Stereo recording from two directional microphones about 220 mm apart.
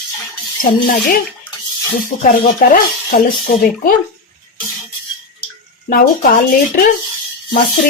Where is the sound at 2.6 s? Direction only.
40° left (ahead or behind).